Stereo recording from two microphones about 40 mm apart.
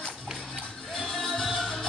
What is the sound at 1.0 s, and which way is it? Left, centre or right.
Music, centre.